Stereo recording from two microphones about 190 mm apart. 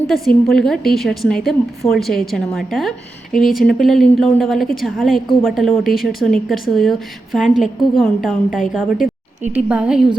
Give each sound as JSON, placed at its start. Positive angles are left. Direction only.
{"t": 0.1, "sound": "a woman's voice", "side_deg": 0}
{"t": 9.0, "sound": "a sound", "side_deg": 50}
{"t": 9.4, "sound": "a woman's voice", "side_deg": -5}